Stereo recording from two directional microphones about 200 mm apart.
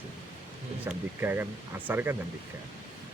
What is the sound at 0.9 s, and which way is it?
Speech, 10° right (ahead or behind).